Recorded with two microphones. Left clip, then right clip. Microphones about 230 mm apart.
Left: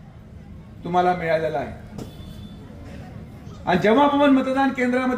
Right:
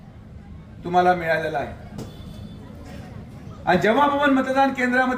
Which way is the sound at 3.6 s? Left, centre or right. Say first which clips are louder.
Even; right.